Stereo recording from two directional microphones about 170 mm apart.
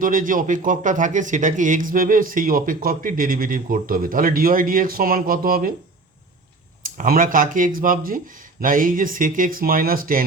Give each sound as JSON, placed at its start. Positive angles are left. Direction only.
{"t": 0.0, "sound": "speech", "side_deg": -50}
{"t": 6.8, "sound": "speech", "side_deg": -55}